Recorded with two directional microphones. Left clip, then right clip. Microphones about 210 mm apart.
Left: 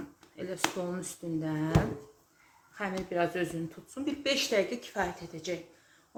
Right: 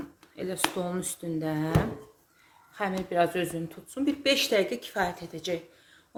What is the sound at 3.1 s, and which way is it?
Speech, 35° right (ahead or behind).